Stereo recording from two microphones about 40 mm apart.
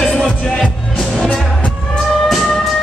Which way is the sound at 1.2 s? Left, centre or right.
Left.